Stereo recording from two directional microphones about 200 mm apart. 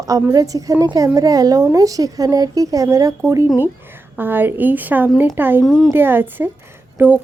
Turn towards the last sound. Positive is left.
turn(degrees=-10)  # may be behind; listen again after turning